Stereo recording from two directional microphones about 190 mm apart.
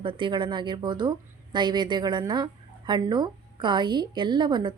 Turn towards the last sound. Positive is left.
turn(degrees=-25)  # may be behind; listen again after turning